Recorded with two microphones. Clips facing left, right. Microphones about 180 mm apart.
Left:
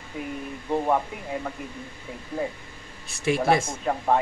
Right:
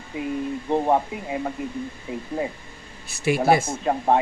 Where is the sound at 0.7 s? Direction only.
25° right (ahead or behind).